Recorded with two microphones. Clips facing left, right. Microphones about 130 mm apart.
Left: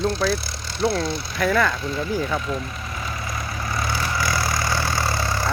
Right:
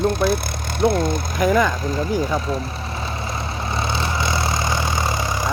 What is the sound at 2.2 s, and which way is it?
Speech, 35° right (ahead or behind).